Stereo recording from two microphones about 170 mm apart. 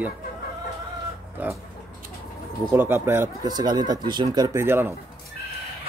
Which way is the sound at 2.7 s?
15° right (ahead or behind).